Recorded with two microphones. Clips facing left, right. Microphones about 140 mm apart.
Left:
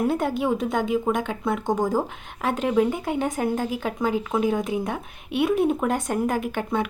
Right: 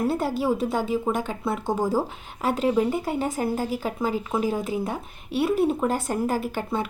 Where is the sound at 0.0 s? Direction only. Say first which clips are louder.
Left 1 dB; 5° right (ahead or behind).